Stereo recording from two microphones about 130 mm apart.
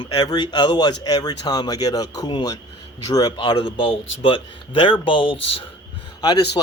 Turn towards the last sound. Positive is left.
turn(degrees=30)  # may be behind; listen again after turning